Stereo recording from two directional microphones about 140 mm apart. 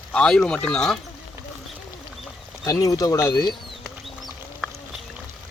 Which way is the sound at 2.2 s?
Centre (ahead or behind).